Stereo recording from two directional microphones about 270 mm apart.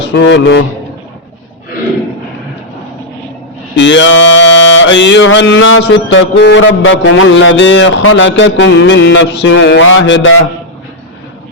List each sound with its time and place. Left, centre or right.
0.0 s a man's voice: left
3.8 s mantra: left